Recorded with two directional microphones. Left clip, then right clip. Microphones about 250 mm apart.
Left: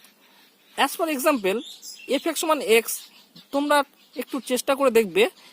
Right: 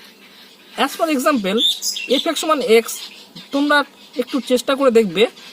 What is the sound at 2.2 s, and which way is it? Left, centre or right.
Speech, left.